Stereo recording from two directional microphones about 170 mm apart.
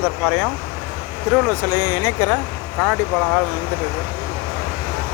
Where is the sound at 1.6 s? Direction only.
20° left (ahead or behind).